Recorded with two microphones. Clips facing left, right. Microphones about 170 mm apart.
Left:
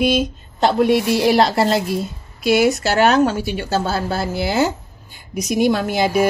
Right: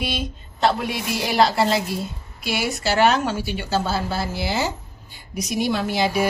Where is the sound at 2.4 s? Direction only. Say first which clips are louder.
Left 9 dB; 50° left (ahead or behind).